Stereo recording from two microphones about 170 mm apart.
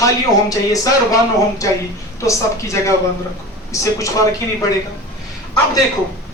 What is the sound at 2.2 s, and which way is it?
Speech, 15° left (ahead or behind).